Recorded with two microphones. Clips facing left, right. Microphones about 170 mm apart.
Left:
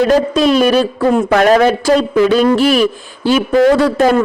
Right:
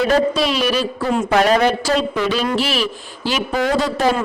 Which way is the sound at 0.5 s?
50° left (ahead or behind).